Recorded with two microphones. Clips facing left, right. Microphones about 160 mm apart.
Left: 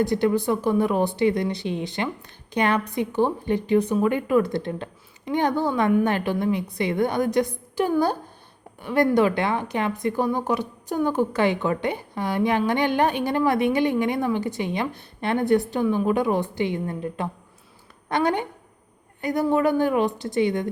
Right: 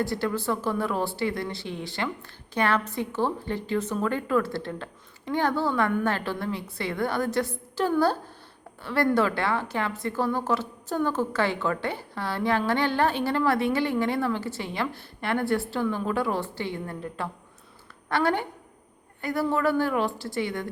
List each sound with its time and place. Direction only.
0.0 s a woman's voice: 20° left (ahead or behind)